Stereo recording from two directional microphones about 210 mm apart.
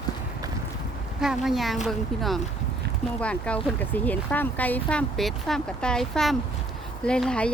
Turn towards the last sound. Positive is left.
turn(degrees=5)  # may be behind; listen again after turning